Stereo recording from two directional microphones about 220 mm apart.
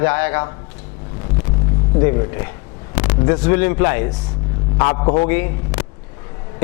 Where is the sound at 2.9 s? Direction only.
20° left (ahead or behind).